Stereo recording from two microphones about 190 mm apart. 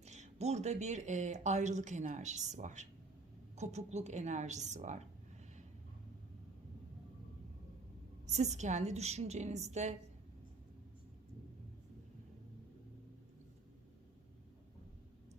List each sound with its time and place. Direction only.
0.0 s speech: 35° right (ahead or behind)
8.3 s speech: 35° right (ahead or behind)